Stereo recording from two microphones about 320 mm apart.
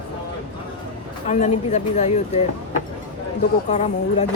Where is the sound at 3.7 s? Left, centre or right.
Left.